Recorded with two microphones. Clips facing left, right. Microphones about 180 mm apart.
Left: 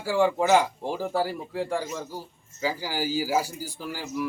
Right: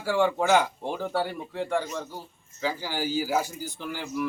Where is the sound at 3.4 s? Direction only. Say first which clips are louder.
Even; 35° left (ahead or behind).